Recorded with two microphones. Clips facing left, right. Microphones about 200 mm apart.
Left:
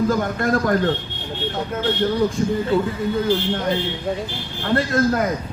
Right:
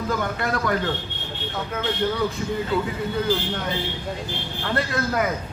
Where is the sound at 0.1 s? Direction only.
45° left (ahead or behind).